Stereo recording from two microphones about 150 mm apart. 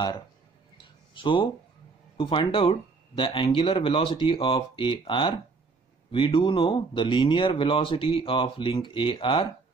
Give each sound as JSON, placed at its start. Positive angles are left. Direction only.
{"t": 1.1, "sound": "speech", "side_deg": 35}